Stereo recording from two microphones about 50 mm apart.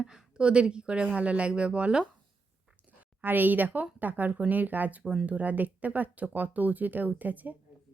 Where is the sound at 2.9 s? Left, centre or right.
Right.